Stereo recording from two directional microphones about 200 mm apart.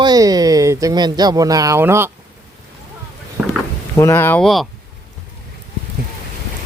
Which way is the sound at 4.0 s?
10° left (ahead or behind).